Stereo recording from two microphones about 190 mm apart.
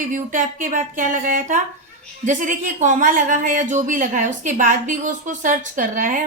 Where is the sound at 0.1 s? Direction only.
45° right (ahead or behind).